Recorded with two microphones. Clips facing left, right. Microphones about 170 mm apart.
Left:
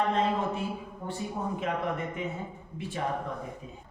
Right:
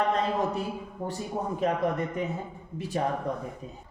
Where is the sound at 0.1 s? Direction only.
40° right (ahead or behind).